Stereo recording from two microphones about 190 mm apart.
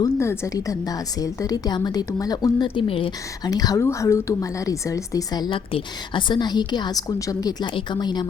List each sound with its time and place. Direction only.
0.0 s a woman's voice: 15° left (ahead or behind)